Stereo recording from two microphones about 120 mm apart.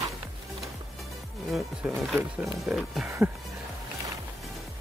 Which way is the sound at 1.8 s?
10° right (ahead or behind).